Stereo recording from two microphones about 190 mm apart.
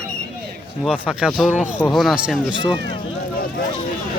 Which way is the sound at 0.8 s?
5° left (ahead or behind).